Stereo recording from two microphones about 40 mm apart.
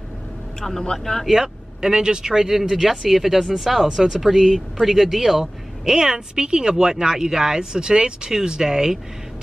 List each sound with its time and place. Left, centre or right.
0.6 s speech: centre
1.2 s speech: centre